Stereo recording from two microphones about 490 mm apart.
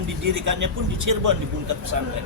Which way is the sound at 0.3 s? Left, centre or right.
Right.